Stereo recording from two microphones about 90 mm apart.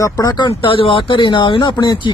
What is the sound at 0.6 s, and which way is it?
Speech, 80° left.